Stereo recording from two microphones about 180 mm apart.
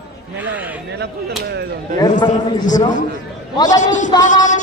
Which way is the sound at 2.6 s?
45° left (ahead or behind).